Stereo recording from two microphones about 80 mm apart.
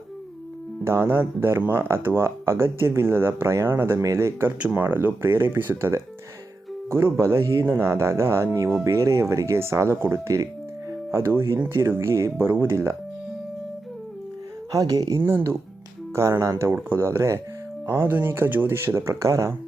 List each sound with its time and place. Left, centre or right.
0.9 s speech: right
7.6 s speech: right
14.7 s speech: right
15.2 s speech: right